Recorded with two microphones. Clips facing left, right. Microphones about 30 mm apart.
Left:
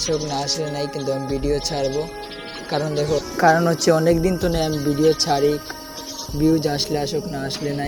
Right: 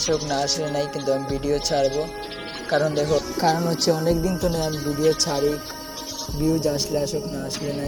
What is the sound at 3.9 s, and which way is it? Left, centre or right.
Speech, left.